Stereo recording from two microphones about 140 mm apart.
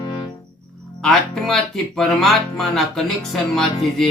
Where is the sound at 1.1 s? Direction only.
5° left (ahead or behind).